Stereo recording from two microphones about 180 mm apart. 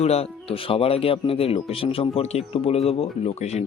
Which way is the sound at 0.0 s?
35° left (ahead or behind).